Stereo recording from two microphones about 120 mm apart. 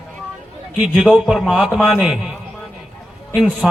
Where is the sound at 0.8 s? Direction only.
Centre (ahead or behind).